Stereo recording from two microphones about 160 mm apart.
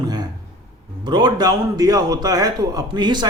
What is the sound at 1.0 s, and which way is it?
A man's voice, 25° right (ahead or behind).